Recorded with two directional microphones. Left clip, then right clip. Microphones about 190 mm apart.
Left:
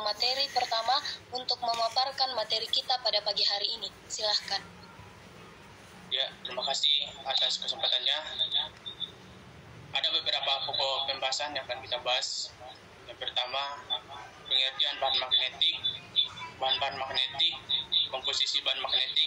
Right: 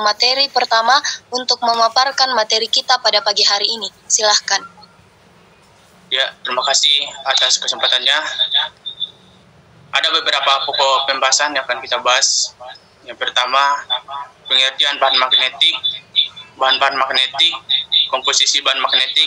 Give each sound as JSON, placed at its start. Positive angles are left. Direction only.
{"t": 0.0, "sound": "a woman's voice", "side_deg": -55}
{"t": 6.0, "sound": "a woman's voice", "side_deg": -55}